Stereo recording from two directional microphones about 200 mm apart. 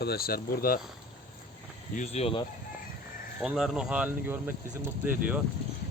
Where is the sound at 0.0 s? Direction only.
50° left (ahead or behind).